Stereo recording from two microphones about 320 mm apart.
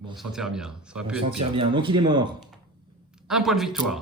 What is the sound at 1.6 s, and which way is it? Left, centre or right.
Speech, centre.